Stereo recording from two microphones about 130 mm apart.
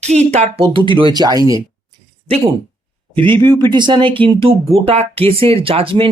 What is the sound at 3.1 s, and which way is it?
Speech, 40° right (ahead or behind).